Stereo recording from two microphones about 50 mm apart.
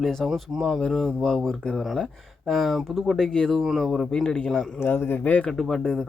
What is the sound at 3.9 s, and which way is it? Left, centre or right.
Speech, centre.